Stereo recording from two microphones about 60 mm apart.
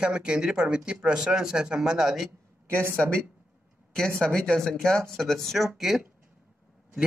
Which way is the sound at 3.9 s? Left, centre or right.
Centre.